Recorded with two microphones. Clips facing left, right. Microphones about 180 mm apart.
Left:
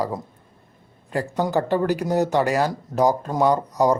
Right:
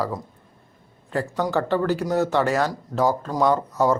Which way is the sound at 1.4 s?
20° left (ahead or behind).